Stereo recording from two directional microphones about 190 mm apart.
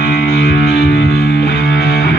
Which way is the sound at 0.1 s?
55° left (ahead or behind).